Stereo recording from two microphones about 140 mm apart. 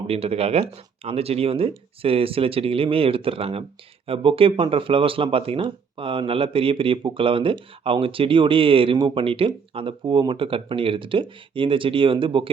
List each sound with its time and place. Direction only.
0.1 s speech: 45° right (ahead or behind)